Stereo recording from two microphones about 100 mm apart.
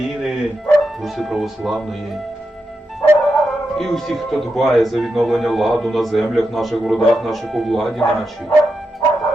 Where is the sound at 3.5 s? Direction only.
5° left (ahead or behind).